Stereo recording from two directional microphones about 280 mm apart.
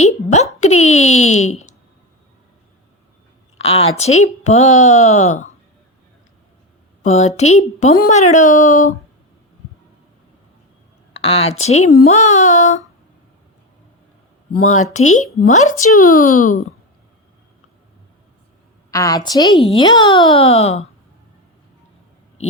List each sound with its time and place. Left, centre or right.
0.1 s a sound: left
0.6 s speech: left
1.2 s speech: left
3.6 s speech: left
7.0 s speech: left
11.1 s speech: left
15.1 s speech: left
18.9 s a woman's voice: centre